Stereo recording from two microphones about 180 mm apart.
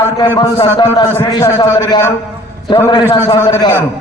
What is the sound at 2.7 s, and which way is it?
A man's voice, 25° left (ahead or behind).